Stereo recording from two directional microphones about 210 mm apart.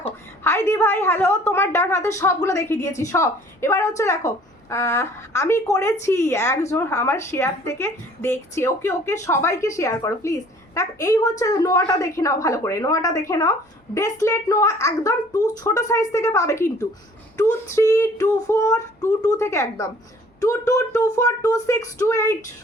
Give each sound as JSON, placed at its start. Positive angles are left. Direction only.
{"t": 0.4, "sound": "a woman's voice", "side_deg": 10}